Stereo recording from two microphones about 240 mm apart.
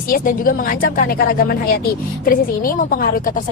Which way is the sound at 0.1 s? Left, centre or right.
Left.